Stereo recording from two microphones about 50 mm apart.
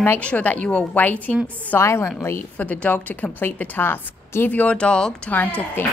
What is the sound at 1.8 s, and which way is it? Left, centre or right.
Speech, left.